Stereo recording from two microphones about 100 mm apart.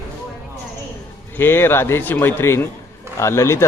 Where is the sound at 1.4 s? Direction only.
25° left (ahead or behind).